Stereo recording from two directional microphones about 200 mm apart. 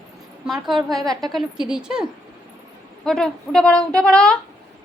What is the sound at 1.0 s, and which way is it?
Speech, 20° right (ahead or behind).